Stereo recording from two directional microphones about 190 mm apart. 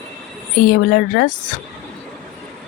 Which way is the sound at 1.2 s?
55° left (ahead or behind).